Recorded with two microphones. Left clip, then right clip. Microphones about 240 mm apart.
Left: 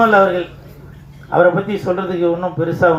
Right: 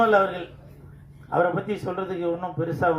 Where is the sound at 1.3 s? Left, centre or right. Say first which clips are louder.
Left 10 dB; right.